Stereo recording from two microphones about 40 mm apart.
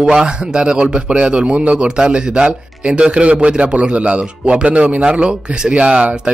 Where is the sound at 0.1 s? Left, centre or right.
Right.